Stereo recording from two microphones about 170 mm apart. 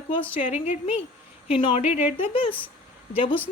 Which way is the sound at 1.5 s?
30° left (ahead or behind).